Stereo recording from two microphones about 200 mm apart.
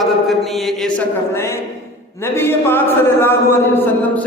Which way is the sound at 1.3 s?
15° left (ahead or behind).